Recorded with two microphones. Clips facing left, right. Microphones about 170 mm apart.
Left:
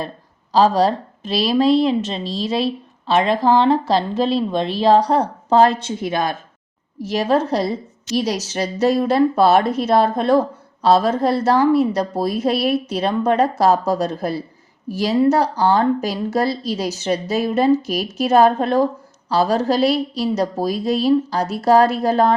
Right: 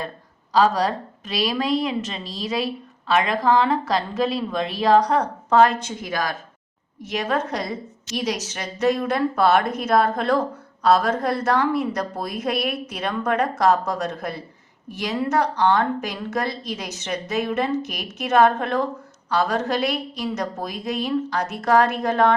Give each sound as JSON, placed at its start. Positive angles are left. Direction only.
{"t": 0.5, "sound": "a woman's voice", "side_deg": 30}